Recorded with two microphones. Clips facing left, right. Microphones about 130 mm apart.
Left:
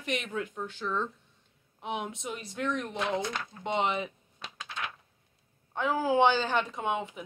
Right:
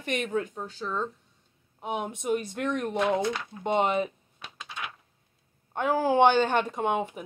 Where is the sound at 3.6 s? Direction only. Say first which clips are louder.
Right 5 dB; 45° right (ahead or behind).